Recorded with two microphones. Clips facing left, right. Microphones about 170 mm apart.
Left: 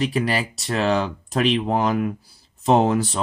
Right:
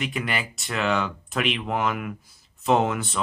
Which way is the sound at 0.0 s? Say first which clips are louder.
Left 6 dB; 35° left (ahead or behind).